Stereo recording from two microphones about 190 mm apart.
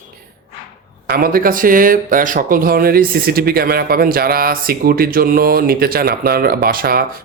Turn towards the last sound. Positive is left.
turn(degrees=-50)  # may be behind; listen again after turning